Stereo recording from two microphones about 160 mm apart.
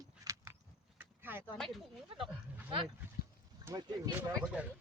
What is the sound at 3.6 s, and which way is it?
Speech, 15° right (ahead or behind).